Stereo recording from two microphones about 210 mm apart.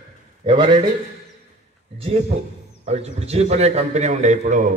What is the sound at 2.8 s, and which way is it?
A man's voice, 30° right (ahead or behind).